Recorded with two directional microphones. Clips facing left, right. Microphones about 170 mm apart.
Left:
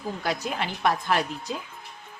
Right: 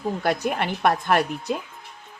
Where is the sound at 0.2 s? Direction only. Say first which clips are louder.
Right 4 dB; 55° right (ahead or behind).